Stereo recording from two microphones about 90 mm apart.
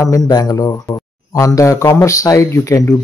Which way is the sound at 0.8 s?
40° left (ahead or behind).